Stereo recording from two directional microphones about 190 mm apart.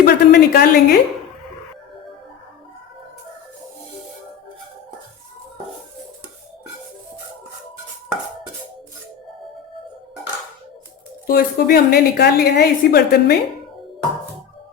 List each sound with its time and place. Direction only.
0.0 s a woman's voice: 55° left (ahead or behind)
11.3 s a woman's voice: 50° left (ahead or behind)